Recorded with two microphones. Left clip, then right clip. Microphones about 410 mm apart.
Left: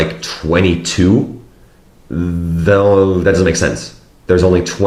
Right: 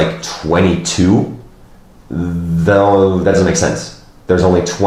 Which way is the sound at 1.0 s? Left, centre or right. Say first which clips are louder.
Left 1 dB; left.